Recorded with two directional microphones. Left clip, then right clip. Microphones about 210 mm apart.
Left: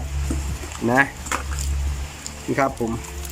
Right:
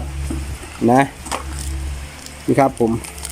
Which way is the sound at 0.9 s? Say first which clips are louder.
Right 4 dB; 15° right (ahead or behind).